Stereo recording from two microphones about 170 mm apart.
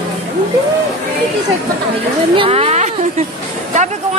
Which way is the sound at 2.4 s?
35° right (ahead or behind).